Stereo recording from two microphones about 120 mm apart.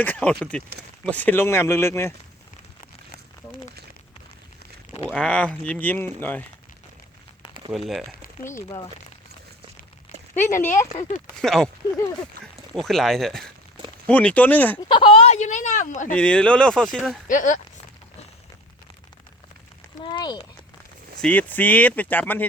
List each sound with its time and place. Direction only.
0.0 s speech: 15° left (ahead or behind)
5.1 s speech: 10° left (ahead or behind)
7.7 s speech: centre (ahead or behind)
8.4 s speech: 25° left (ahead or behind)
10.6 s speech: 20° left (ahead or behind)
11.3 s speech: 5° left (ahead or behind)
12.7 s speech: centre (ahead or behind)
14.8 s speech: 45° left (ahead or behind); by 16.1 s 90° left
16.1 s speech: 10° left (ahead or behind)
17.2 s speech: 90° left
20.1 s a sound: 40° left (ahead or behind)
21.2 s speech: 15° left (ahead or behind)